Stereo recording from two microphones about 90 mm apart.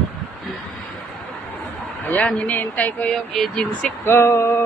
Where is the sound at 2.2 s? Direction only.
15° left (ahead or behind).